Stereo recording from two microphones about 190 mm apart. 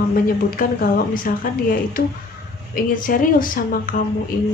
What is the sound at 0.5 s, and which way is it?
Speech, 50° left (ahead or behind).